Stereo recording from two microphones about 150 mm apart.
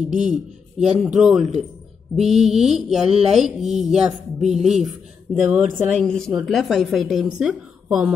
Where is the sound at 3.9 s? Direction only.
50° right (ahead or behind).